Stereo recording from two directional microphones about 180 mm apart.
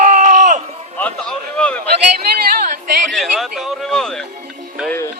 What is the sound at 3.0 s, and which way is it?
Speech, centre (ahead or behind).